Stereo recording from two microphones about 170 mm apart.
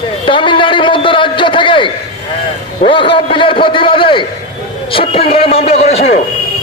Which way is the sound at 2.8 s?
30° left (ahead or behind).